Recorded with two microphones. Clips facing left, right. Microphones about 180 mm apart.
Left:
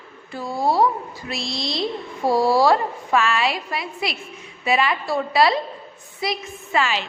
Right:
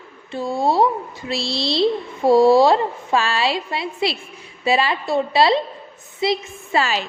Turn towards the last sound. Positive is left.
turn(degrees=-35)  # may be behind; listen again after turning